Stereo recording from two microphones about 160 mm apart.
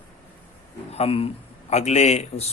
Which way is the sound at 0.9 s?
40° left (ahead or behind).